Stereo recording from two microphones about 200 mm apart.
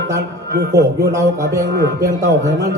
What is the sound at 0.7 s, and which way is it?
Speech, 15° right (ahead or behind).